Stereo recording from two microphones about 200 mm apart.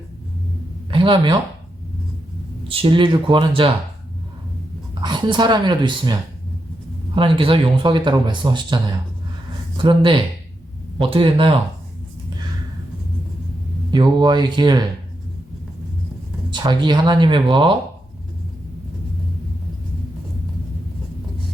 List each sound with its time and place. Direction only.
0.9 s a sound: 25° right (ahead or behind)
2.6 s speech: 25° right (ahead or behind)
5.0 s speech: 20° right (ahead or behind)
7.2 s speech: 25° right (ahead or behind)
13.9 s speech: 20° right (ahead or behind)
16.5 s speech: 20° right (ahead or behind)